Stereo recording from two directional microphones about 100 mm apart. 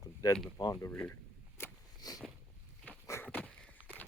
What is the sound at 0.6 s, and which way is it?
Speech, 35° left (ahead or behind).